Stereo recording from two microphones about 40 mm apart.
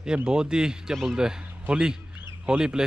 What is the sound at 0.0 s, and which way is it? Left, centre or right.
Speech, right.